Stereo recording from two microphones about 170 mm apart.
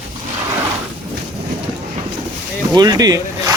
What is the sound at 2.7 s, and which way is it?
Speech, 25° right (ahead or behind).